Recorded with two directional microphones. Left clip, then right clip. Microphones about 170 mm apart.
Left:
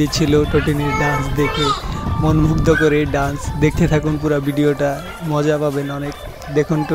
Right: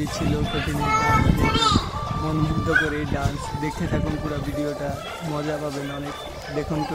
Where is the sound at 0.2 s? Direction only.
40° left (ahead or behind).